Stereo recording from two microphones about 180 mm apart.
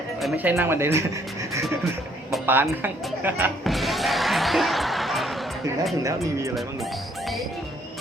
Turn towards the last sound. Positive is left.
turn(degrees=0)  # may be behind; listen again after turning